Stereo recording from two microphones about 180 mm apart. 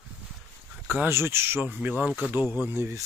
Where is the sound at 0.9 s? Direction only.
10° right (ahead or behind).